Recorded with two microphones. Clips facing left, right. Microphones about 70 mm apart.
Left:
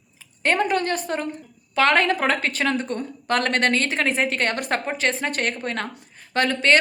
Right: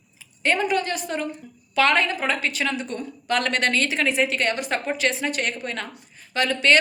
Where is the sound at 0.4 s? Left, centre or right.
Left.